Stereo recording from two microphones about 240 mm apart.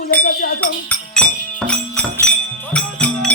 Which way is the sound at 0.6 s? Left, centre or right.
Centre.